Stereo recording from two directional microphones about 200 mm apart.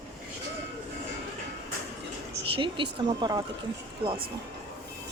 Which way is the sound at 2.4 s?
25° right (ahead or behind).